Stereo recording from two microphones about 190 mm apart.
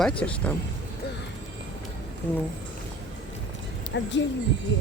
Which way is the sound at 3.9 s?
70° left (ahead or behind).